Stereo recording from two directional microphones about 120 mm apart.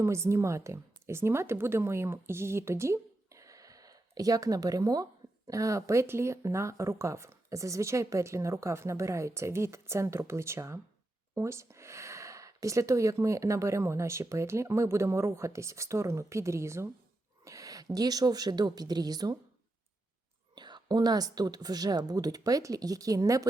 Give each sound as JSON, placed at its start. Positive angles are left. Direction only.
{"t": 0.0, "sound": "speech", "side_deg": -25}
{"t": 20.6, "sound": "a woman's voice", "side_deg": -35}